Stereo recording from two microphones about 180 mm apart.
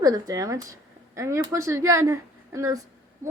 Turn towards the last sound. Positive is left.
turn(degrees=-20)  # may be behind; listen again after turning